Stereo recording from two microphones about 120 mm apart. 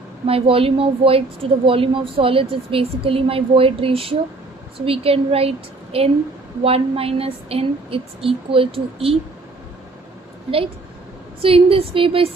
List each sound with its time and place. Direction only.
0.3 s a woman's voice: 50° right (ahead or behind)
11.4 s a woman's voice: 50° right (ahead or behind)